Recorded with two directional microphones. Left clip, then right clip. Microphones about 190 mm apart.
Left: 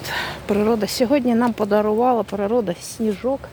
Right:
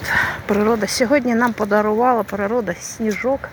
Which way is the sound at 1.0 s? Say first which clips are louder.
Right 2 dB; 40° left (ahead or behind).